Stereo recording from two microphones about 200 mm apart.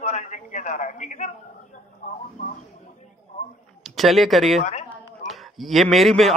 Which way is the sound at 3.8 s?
Centre (ahead or behind).